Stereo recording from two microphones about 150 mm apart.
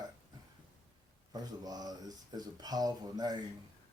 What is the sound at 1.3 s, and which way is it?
Speech, 25° right (ahead or behind).